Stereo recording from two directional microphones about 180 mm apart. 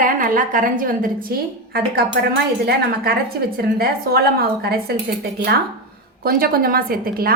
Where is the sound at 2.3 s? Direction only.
60° right (ahead or behind).